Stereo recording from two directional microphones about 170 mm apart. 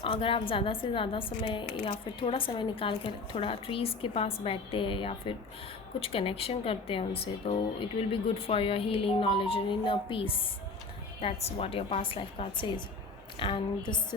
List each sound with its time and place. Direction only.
0.0 s a woman's voice: 30° left (ahead or behind)